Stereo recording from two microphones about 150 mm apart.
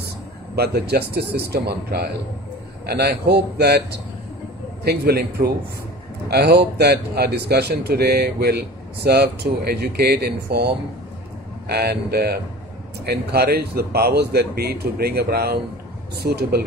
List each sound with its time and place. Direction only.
0.6 s speech: 90° right
11.7 s speech: 90° right